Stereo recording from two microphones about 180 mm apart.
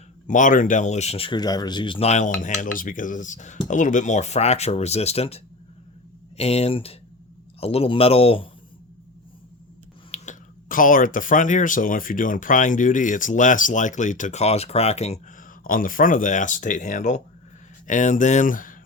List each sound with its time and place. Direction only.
0.3 s speech: 45° left (ahead or behind)
10.1 s speech: 45° left (ahead or behind)
15.6 s speech: 50° left (ahead or behind)